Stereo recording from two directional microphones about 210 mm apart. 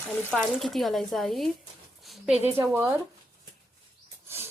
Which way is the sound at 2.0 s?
Centre (ahead or behind).